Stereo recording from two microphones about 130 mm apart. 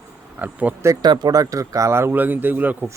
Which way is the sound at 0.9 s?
30° right (ahead or behind).